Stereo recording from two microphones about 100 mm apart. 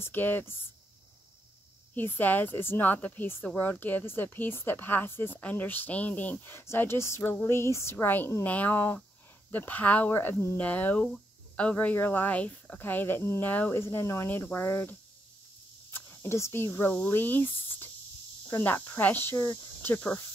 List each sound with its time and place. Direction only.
0.0 s a woman's voice: 20° left (ahead or behind)
2.0 s a woman's voice: 20° left (ahead or behind)